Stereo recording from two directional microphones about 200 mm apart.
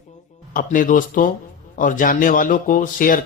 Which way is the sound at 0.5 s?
40° left (ahead or behind).